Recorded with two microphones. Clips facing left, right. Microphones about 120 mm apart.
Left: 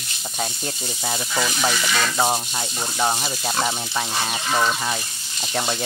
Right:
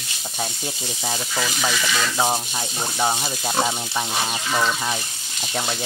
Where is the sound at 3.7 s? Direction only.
5° right (ahead or behind).